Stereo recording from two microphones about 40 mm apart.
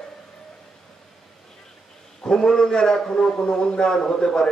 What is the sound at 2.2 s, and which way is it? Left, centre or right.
A man's voice, centre.